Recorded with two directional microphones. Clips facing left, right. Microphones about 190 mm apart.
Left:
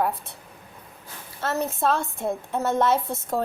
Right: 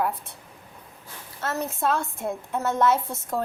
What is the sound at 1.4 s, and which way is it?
A woman's voice, 30° left (ahead or behind).